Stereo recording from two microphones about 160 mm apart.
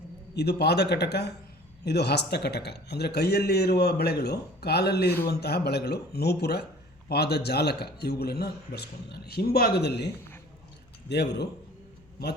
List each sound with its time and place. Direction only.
0.3 s a man's voice: 90° left
11.1 s a man's voice: 90° left